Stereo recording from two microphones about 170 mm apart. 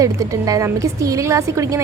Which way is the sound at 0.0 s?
20° right (ahead or behind).